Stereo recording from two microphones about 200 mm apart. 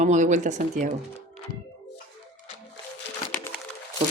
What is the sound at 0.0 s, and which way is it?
Speech, 35° right (ahead or behind).